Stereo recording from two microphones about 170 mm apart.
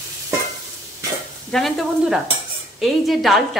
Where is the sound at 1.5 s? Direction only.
Centre (ahead or behind).